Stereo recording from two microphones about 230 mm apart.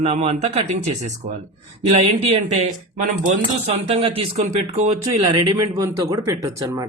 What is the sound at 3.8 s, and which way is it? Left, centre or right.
A man's voice, right.